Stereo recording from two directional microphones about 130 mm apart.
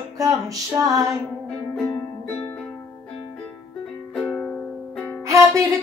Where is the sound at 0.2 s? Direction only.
25° right (ahead or behind).